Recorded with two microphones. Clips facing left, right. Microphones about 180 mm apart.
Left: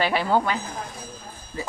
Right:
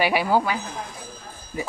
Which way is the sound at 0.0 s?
10° right (ahead or behind).